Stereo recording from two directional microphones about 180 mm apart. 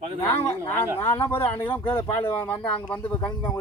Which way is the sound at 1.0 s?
15° left (ahead or behind).